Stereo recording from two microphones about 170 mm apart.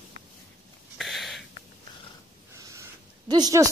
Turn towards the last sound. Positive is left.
turn(degrees=-20)  # may be behind; listen again after turning